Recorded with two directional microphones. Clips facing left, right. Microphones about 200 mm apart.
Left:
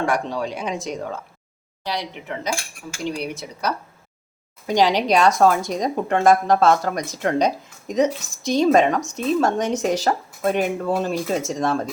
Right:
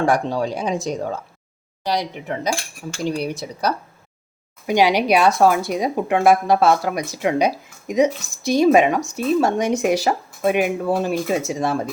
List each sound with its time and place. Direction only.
0.0 s speech: 30° right (ahead or behind)
4.6 s speech: 10° right (ahead or behind)